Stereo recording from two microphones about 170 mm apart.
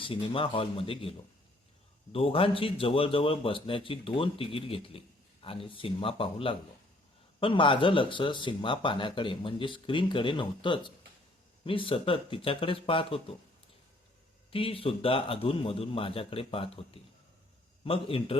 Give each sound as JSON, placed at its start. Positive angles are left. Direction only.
{"t": 0.0, "sound": "speech", "side_deg": 30}
{"t": 2.1, "sound": "speech", "side_deg": 35}
{"t": 14.5, "sound": "speech", "side_deg": 35}